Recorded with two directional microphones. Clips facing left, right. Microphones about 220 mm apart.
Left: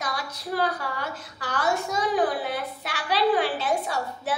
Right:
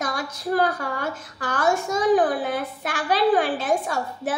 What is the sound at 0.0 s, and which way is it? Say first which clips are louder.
A woman's voice: right 5 dB; 50° right (ahead or behind).